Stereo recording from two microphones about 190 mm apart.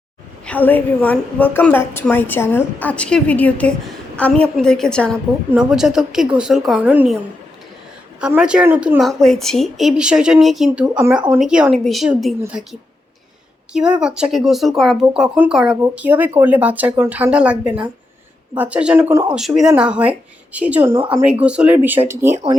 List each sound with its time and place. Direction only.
0.4 s a woman's voice: 10° left (ahead or behind)
5.1 s speech: 10° right (ahead or behind)
8.2 s speech: 5° right (ahead or behind)
13.7 s speech: 5° right (ahead or behind)